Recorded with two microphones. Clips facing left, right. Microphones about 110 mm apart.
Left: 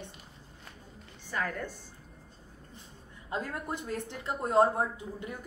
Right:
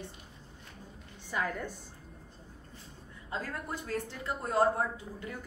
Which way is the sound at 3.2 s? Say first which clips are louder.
Left 3 dB; 20° left (ahead or behind).